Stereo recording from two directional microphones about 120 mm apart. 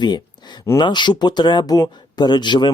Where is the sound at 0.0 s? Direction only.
40° left (ahead or behind).